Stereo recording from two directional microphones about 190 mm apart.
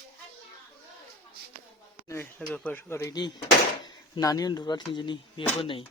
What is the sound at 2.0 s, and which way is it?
Speech, 10° left (ahead or behind).